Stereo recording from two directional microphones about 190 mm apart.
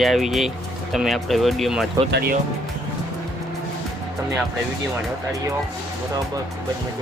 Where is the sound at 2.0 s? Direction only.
60° right (ahead or behind).